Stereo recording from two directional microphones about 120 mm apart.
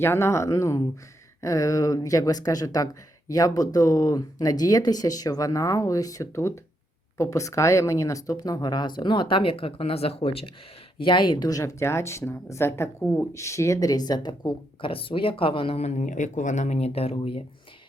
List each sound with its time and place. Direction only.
0.0 s speech: 20° left (ahead or behind); by 10.5 s 55° left (ahead or behind)
10.9 s speech: 40° left (ahead or behind)